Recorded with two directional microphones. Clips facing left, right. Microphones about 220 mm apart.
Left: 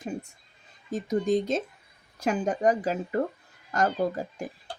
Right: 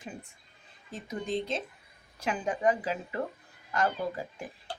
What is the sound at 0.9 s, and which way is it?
Speech, 45° left (ahead or behind).